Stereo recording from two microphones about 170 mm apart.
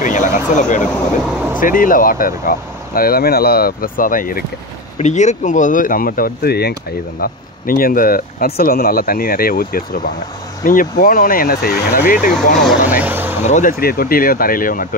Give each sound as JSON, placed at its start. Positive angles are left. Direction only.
{"t": 0.0, "sound": "speech", "side_deg": 50}
{"t": 0.8, "sound": "speech", "side_deg": -5}
{"t": 1.6, "sound": "speech", "side_deg": 55}
{"t": 4.9, "sound": "speech", "side_deg": 45}
{"t": 12.8, "sound": "speech", "side_deg": -10}
{"t": 13.5, "sound": "speech", "side_deg": 50}